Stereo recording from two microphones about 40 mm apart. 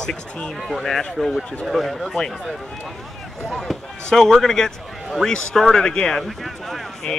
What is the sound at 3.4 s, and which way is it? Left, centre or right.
A man's voice, centre.